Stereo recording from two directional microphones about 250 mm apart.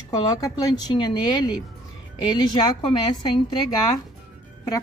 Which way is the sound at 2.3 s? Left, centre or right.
Left.